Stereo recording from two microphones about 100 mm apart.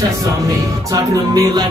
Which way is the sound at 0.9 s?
35° right (ahead or behind).